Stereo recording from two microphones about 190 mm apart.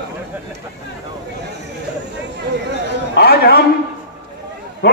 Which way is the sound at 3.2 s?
55° left (ahead or behind).